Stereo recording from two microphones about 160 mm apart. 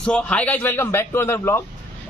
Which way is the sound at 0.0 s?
5° left (ahead or behind).